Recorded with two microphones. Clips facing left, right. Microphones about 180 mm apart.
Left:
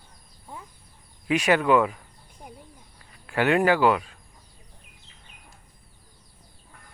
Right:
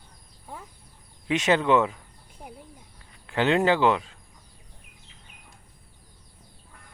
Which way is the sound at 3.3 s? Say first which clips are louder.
Left 1 dB; 20° right (ahead or behind).